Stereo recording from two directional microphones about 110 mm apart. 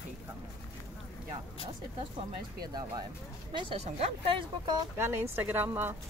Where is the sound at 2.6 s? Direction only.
35° right (ahead or behind).